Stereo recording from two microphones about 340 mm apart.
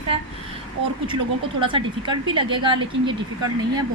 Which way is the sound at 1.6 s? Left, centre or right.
Centre.